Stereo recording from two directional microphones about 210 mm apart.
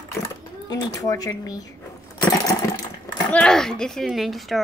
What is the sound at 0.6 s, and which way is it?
Speech, 15° left (ahead or behind).